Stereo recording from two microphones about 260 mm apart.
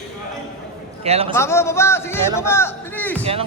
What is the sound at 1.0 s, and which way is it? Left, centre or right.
Speech, right.